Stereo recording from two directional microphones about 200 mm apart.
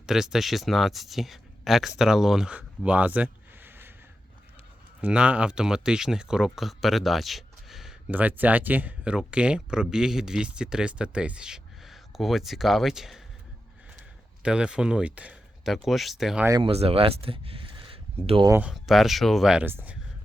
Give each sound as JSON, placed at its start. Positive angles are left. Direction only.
{"t": 0.0, "sound": "speech", "side_deg": -5}
{"t": 4.9, "sound": "speech", "side_deg": -5}
{"t": 14.4, "sound": "speech", "side_deg": -5}
{"t": 16.5, "sound": "speech", "side_deg": -25}
{"t": 18.5, "sound": "speech", "side_deg": -5}